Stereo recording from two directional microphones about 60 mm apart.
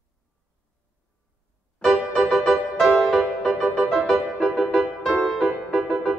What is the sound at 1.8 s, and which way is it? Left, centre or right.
Music, centre.